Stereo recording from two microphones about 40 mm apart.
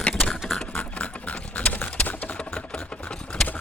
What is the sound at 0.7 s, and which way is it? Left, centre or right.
Horse, left.